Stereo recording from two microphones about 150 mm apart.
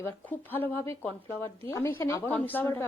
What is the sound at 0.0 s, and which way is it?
Speech, 10° left (ahead or behind).